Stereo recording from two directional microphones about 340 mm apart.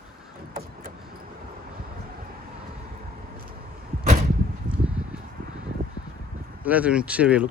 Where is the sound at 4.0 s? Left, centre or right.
Centre.